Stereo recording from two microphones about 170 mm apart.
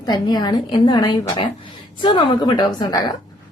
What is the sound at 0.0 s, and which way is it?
A woman's voice, 25° left (ahead or behind).